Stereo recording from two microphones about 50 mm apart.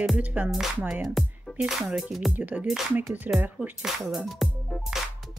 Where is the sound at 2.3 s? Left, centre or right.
Right.